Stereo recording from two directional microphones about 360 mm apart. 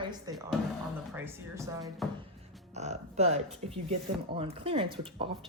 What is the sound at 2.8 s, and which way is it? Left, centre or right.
Speech, centre.